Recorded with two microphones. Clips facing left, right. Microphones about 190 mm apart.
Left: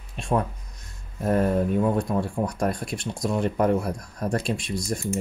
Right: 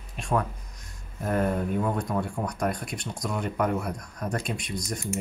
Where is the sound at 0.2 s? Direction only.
25° left (ahead or behind).